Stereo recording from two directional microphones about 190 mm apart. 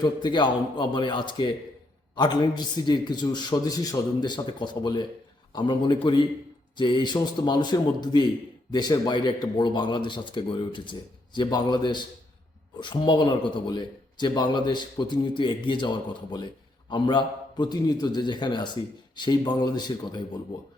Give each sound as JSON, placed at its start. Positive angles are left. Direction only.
{"t": 0.0, "sound": "speech", "side_deg": 25}